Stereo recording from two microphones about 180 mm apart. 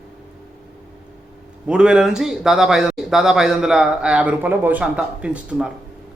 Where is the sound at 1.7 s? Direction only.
5° right (ahead or behind).